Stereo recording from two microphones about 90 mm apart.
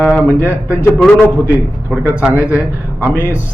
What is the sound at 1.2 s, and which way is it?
Mantra, 20° right (ahead or behind).